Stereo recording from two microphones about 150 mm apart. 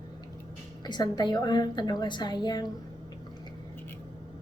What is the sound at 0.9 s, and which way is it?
A woman's voice, 25° left (ahead or behind).